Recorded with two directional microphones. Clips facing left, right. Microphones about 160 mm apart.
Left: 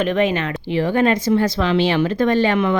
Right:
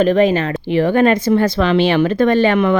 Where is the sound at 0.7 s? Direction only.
60° right (ahead or behind).